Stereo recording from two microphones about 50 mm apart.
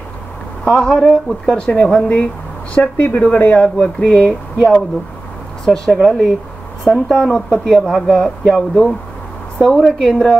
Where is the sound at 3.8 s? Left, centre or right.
Centre.